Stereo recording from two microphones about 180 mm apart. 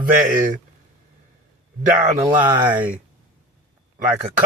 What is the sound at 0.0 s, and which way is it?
Speech, 50° right (ahead or behind).